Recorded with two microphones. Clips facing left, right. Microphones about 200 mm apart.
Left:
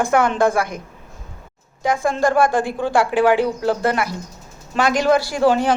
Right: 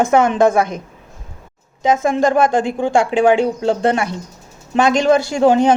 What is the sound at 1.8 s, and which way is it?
A man's voice, 20° right (ahead or behind).